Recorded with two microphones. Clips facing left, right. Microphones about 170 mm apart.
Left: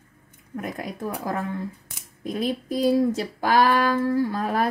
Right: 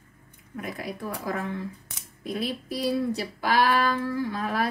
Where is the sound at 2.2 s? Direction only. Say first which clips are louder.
Left 4 dB; 45° left (ahead or behind).